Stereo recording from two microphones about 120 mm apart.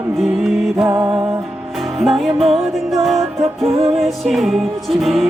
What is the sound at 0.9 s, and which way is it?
Music, 25° right (ahead or behind).